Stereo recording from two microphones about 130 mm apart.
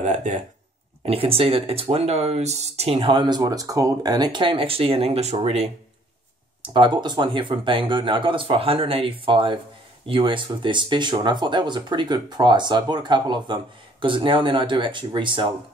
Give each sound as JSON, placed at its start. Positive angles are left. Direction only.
{"t": 0.0, "sound": "speech", "side_deg": -70}
{"t": 1.0, "sound": "speech", "side_deg": -45}
{"t": 6.6, "sound": "speech", "side_deg": -40}